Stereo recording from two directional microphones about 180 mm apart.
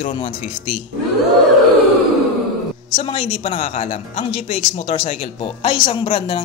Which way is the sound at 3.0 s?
35° left (ahead or behind).